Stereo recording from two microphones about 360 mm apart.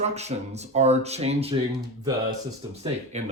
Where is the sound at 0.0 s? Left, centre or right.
Centre.